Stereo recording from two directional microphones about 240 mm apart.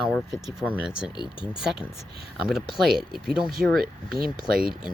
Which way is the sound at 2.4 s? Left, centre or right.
Centre.